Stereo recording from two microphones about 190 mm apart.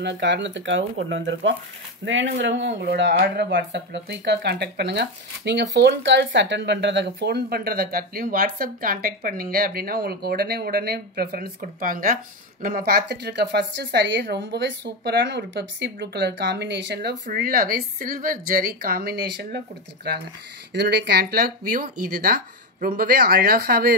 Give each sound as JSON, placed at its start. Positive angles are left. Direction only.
{"t": 0.0, "sound": "speech", "side_deg": -70}
{"t": 3.2, "sound": "speech", "side_deg": -50}
{"t": 3.5, "sound": "speech", "side_deg": -65}
{"t": 20.7, "sound": "speech", "side_deg": -60}